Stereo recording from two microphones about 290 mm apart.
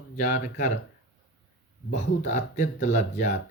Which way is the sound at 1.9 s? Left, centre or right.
Left.